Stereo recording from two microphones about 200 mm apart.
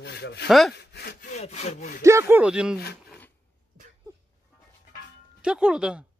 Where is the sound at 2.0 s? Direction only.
15° right (ahead or behind).